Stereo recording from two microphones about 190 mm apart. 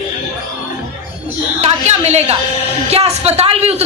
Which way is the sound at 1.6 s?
35° right (ahead or behind).